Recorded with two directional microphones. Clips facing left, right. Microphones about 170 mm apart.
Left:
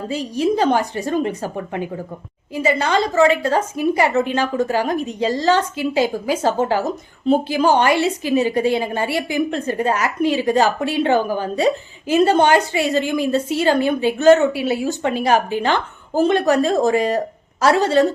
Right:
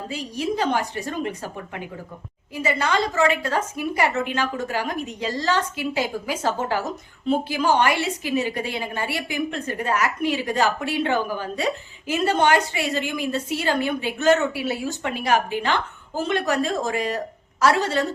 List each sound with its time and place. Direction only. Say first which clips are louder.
0.1 s a woman's voice: left 8 dB; 35° left (ahead or behind)